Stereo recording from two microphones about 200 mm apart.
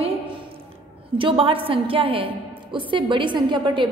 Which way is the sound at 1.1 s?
25° right (ahead or behind).